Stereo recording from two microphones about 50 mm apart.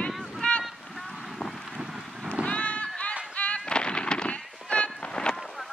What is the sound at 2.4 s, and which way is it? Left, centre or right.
Run, left.